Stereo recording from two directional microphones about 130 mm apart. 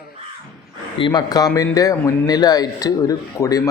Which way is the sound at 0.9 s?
35° left (ahead or behind).